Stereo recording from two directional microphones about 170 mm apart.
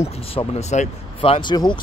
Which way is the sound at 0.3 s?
35° left (ahead or behind).